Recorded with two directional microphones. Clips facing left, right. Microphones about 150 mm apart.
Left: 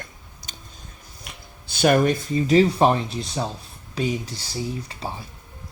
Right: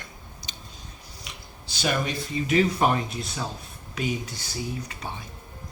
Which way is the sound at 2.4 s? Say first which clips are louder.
Left 5 dB; 30° left (ahead or behind).